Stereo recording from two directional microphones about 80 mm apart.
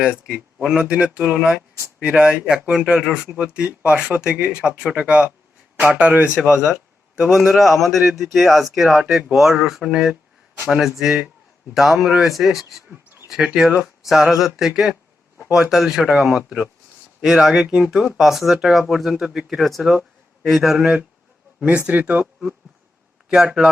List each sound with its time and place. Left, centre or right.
0.0 s a man's voice: centre
23.3 s speech: centre